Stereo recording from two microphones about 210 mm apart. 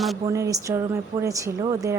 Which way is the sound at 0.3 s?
15° right (ahead or behind).